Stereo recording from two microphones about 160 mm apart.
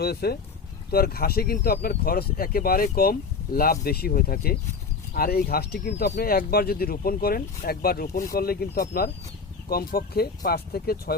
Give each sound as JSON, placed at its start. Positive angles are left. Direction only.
{"t": 0.0, "sound": "speech", "side_deg": 85}
{"t": 0.9, "sound": "speech", "side_deg": 70}